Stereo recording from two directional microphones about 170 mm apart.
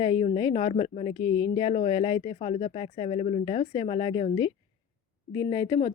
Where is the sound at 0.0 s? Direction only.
30° left (ahead or behind).